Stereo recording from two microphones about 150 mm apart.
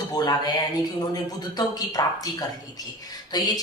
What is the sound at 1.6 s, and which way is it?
Speech, 25° left (ahead or behind).